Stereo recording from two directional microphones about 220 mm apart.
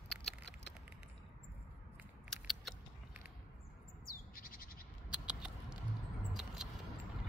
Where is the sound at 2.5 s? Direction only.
Centre (ahead or behind).